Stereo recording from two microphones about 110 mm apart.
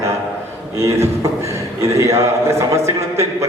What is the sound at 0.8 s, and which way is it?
A man's voice, 25° right (ahead or behind).